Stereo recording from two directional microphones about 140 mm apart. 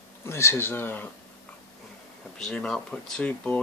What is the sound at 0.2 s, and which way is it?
Speech, 20° left (ahead or behind).